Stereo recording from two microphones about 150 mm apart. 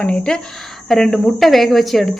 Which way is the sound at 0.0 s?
5° left (ahead or behind).